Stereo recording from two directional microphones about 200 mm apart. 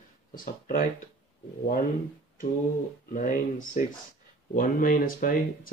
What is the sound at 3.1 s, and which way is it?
Speech, 40° left (ahead or behind).